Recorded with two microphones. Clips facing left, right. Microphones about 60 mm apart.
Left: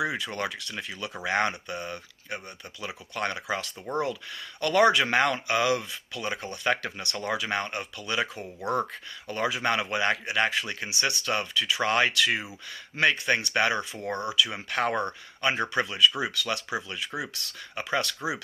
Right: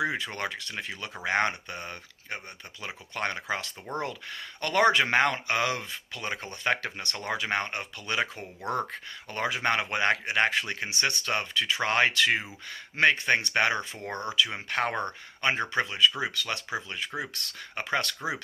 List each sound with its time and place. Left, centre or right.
0.0 s speech: right